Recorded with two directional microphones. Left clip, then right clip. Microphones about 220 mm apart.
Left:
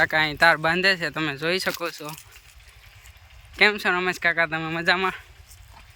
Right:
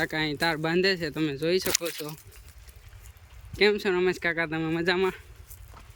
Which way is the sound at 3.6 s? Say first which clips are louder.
Left 3 dB; 5° right (ahead or behind).